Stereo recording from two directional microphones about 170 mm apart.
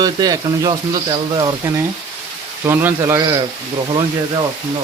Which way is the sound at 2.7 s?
15° right (ahead or behind).